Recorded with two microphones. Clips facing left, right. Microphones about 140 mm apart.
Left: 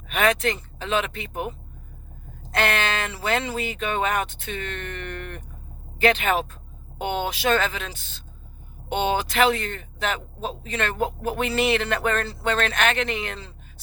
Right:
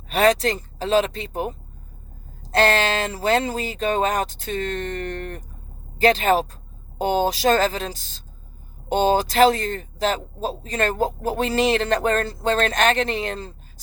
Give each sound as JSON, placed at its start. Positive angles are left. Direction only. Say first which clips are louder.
{"t": 0.1, "sound": "speech", "louder": "right 4 dB", "side_deg": -35}